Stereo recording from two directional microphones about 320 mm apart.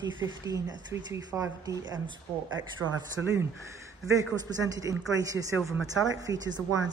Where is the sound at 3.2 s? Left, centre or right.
Centre.